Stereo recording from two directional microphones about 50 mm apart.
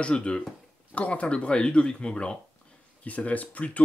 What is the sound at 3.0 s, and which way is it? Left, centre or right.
Speech, left.